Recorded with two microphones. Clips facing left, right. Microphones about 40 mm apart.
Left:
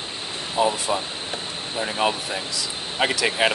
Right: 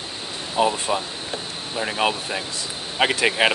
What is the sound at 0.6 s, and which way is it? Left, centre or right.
Speech, centre.